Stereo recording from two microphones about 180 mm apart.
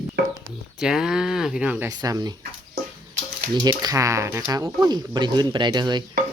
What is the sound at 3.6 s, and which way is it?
Speech, 20° right (ahead or behind).